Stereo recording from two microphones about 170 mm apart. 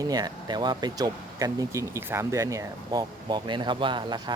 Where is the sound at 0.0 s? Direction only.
25° right (ahead or behind).